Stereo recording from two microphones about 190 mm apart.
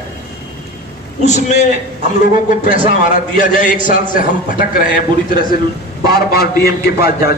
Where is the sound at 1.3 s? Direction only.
40° left (ahead or behind).